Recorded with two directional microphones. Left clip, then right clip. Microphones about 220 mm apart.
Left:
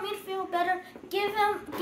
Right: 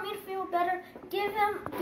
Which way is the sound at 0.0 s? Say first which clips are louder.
Left 2 dB; 20° left (ahead or behind).